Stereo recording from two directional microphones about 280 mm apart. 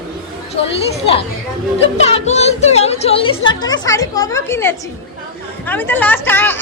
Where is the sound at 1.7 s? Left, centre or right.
Left.